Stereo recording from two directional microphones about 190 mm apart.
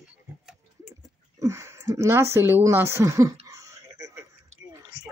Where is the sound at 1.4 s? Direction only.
15° right (ahead or behind).